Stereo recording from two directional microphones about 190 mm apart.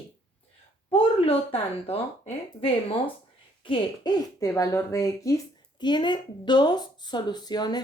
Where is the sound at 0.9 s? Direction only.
30° left (ahead or behind).